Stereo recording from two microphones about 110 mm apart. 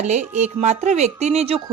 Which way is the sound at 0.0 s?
90° right.